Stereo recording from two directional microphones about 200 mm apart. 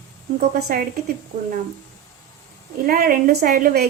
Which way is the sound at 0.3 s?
45° right (ahead or behind).